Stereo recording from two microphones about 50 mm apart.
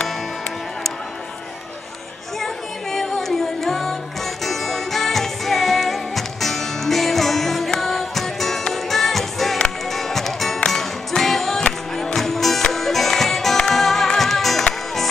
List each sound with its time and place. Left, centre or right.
2.4 s music: centre